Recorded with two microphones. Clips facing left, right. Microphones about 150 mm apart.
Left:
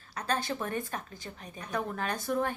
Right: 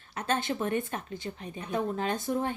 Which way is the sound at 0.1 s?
25° right (ahead or behind).